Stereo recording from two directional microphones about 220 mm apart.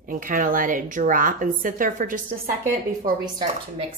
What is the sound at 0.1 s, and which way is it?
Speech, 40° right (ahead or behind).